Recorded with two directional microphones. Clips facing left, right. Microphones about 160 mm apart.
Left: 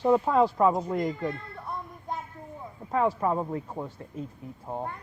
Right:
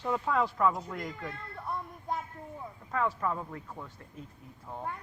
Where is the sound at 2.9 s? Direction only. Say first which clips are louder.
Left 6 dB; 30° left (ahead or behind).